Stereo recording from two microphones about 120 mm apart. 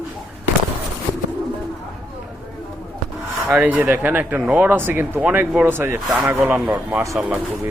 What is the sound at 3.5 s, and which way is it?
Speech, 10° right (ahead or behind).